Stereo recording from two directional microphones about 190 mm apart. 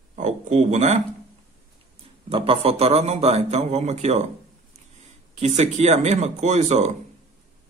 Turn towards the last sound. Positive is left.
turn(degrees=-35)  # may be behind; listen again after turning